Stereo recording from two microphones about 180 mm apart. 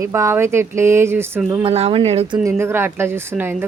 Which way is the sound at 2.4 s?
15° right (ahead or behind).